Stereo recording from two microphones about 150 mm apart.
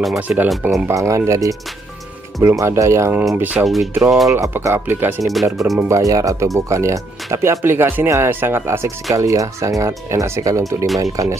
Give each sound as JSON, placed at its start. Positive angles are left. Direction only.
{"t": 0.0, "sound": "speech", "side_deg": 0}
{"t": 0.8, "sound": "speech", "side_deg": -20}
{"t": 2.6, "sound": "speech", "side_deg": -20}
{"t": 3.6, "sound": "speech", "side_deg": 0}
{"t": 4.3, "sound": "speech", "side_deg": -20}
{"t": 5.2, "sound": "speech", "side_deg": 0}
{"t": 5.8, "sound": "speech", "side_deg": -20}